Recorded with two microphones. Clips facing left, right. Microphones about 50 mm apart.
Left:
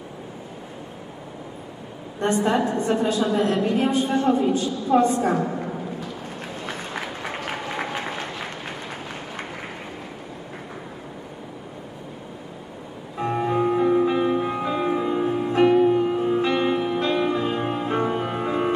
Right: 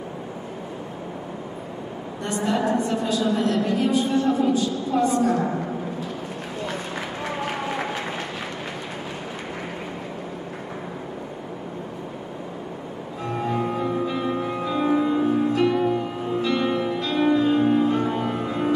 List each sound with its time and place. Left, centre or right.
2.2 s a woman's voice: left
2.6 s a woman's voice: right
2.9 s a woman's voice: left
6.6 s run: centre
13.2 s music: left
15.5 s music: left